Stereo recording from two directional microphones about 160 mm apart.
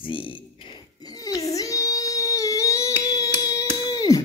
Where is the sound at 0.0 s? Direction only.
30° left (ahead or behind).